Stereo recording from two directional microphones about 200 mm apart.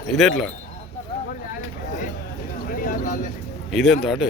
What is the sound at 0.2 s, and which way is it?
Speech, centre (ahead or behind).